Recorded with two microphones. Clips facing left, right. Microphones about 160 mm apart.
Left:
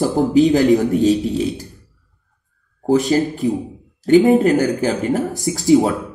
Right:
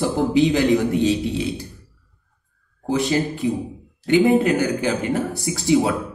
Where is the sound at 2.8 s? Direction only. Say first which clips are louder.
Left 5 dB; 40° left (ahead or behind).